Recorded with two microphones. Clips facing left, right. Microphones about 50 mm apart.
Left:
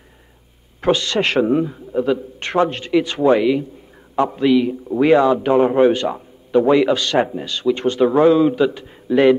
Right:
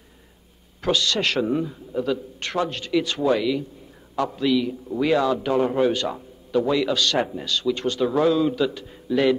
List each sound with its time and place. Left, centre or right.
0.7 s a man's voice: left